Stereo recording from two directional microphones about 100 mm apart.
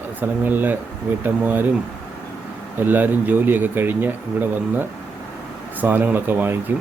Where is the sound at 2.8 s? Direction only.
20° right (ahead or behind).